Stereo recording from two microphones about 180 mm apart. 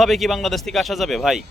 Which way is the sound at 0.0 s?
Centre (ahead or behind).